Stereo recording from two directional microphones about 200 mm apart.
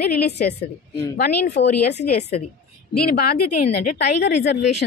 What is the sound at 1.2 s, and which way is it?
Speech, 50° left (ahead or behind).